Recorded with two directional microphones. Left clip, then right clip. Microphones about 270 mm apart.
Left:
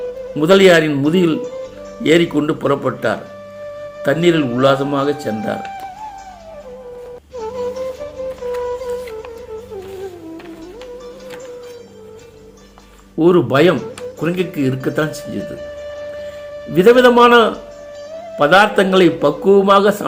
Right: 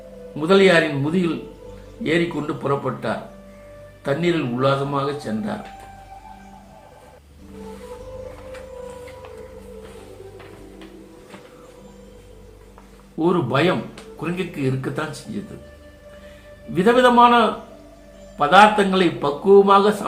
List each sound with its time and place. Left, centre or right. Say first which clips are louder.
0.3 s a man's voice: left 5 dB; left
13.1 s a man's voice: left 7 dB; left
16.7 s a man's voice: left 5 dB; left